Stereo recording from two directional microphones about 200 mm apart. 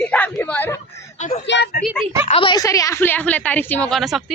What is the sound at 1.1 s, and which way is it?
Speech, 35° left (ahead or behind).